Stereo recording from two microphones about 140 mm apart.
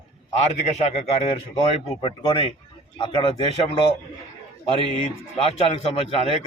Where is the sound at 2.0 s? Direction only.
35° left (ahead or behind).